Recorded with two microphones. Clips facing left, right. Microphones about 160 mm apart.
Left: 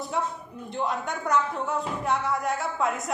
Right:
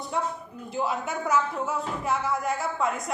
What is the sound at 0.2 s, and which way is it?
Speech, centre (ahead or behind).